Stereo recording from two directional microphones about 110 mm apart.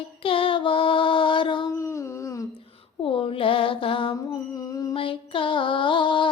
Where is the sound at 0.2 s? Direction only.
55° left (ahead or behind).